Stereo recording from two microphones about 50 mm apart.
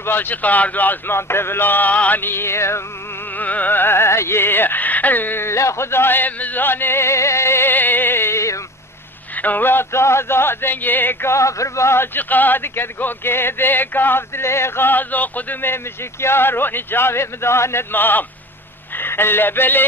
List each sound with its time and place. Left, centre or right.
0.0 s speech: left
1.1 s a man's voice: left
3.3 s music: left
5.4 s a man's voice: left
7.7 s music: left
9.4 s speech: left
11.2 s a man's voice: left
12.2 s speech: left
14.9 s speech: left
15.6 s speech: left
17.9 s speech: left